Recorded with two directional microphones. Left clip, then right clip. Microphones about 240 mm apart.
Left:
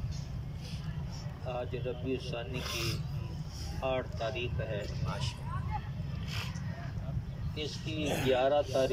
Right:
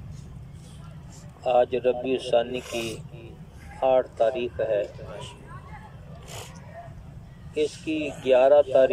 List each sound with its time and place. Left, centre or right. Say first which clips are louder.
1.4 s speech: right 17 dB; right
3.8 s speech: right 13 dB; right
7.5 s speech: right 12 dB; right